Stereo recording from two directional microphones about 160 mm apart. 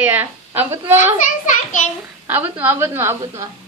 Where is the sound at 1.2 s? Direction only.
55° left (ahead or behind).